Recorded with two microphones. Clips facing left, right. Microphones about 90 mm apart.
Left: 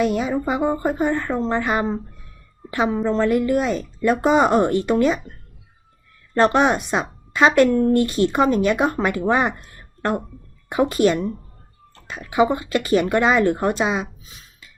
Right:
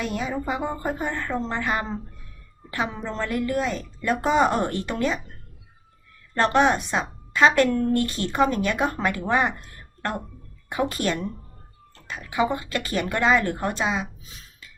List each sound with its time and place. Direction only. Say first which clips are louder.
0.0 s a woman's voice: left 7 dB; 15° left (ahead or behind)
6.3 s speech: left 3 dB; 15° left (ahead or behind)
10.7 s speech: left 7 dB; 15° left (ahead or behind)